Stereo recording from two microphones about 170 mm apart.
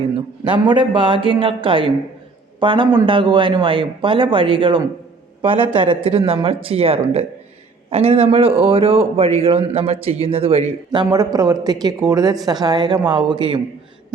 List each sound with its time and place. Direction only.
0.4 s a man's voice: 30° right (ahead or behind)
11.1 s a man's voice: 20° right (ahead or behind)